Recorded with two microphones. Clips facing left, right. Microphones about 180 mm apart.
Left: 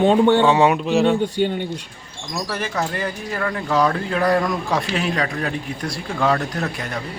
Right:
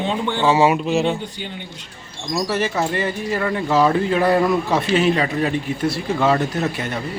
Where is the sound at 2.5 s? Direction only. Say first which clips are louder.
Right 3 dB; 5° right (ahead or behind).